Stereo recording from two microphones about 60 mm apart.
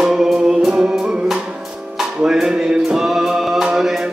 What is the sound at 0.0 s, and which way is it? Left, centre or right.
Music, centre.